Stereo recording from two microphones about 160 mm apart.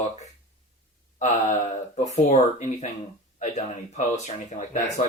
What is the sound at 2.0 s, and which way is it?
Speech, 45° left (ahead or behind).